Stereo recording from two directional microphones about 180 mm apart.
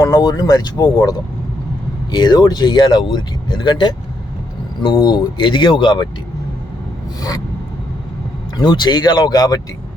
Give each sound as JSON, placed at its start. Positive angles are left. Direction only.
{"t": 0.0, "sound": "speech", "side_deg": 20}
{"t": 7.2, "sound": "speech", "side_deg": 20}
{"t": 8.5, "sound": "speech", "side_deg": 25}